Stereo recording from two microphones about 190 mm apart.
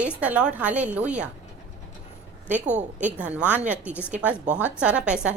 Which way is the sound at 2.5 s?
40° right (ahead or behind).